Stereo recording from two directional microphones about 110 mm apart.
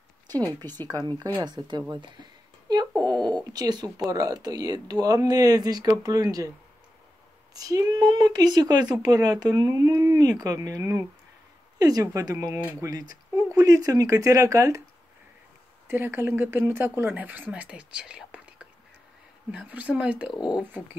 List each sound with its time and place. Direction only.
0.8 s speech: 35° right (ahead or behind)
3.0 s a sound: 40° right (ahead or behind)
4.1 s speech: 35° right (ahead or behind)
7.5 s speech: 35° right (ahead or behind)
15.9 s speech: 20° right (ahead or behind)